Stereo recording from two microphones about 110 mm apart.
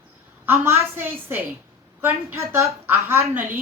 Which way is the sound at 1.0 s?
20° right (ahead or behind).